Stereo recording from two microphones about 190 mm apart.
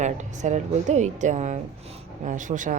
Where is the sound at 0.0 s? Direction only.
40° right (ahead or behind).